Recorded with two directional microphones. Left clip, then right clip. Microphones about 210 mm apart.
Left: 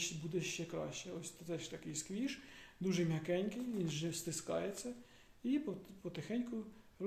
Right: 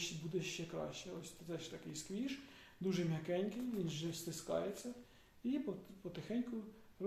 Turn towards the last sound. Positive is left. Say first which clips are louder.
# left 1 dB
turn(degrees=35)  # may be behind; listen again after turning